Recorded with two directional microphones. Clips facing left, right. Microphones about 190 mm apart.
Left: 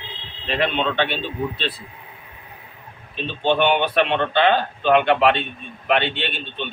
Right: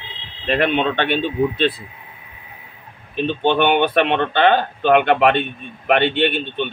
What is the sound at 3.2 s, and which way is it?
Speech, 55° right (ahead or behind).